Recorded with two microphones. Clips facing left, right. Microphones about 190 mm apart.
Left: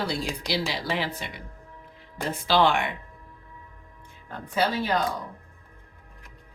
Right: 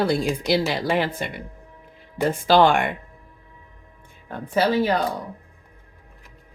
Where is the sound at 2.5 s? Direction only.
50° right (ahead or behind).